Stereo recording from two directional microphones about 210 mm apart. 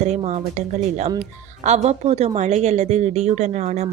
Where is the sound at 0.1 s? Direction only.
30° right (ahead or behind).